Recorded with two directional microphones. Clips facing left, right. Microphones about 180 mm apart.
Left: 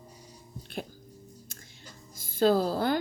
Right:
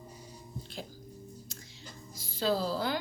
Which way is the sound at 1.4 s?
50° left (ahead or behind).